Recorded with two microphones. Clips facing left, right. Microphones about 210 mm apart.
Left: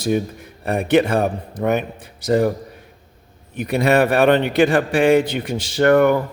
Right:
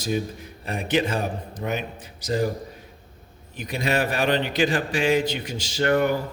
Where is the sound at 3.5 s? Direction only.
60° left (ahead or behind).